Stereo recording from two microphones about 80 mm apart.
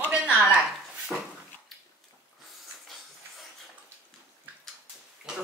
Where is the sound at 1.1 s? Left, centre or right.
Centre.